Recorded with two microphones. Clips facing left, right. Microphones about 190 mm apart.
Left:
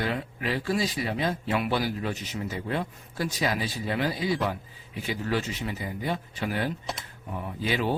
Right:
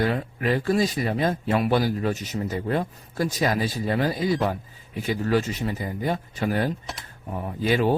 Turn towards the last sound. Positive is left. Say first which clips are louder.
# right 6 dB
turn(degrees=-45)  # may be behind; listen again after turning